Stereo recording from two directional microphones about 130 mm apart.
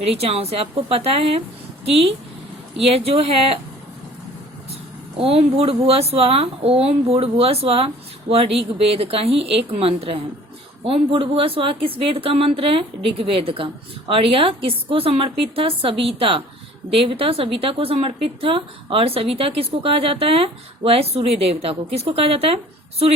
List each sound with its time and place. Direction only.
0.0 s speech: 50° right (ahead or behind)
2.7 s speech: 50° right (ahead or behind)
4.7 s speech: 50° right (ahead or behind)